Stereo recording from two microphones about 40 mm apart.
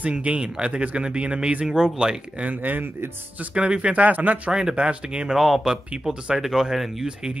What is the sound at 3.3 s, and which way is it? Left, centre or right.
Speech, right.